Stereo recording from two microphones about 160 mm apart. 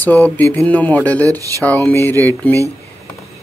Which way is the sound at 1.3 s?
20° right (ahead or behind).